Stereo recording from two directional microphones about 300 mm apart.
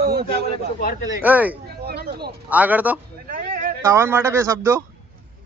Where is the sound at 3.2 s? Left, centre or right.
Right.